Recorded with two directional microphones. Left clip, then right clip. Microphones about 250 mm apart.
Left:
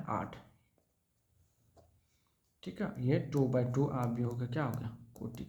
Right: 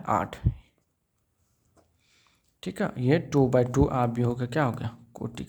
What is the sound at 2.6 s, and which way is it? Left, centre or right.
Speech, right.